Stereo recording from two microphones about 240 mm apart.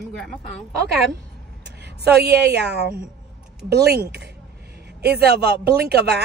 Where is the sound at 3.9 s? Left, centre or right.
Right.